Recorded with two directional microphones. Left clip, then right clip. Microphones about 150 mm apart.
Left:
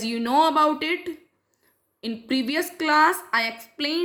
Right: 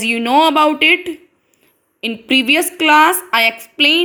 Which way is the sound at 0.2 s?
15° right (ahead or behind).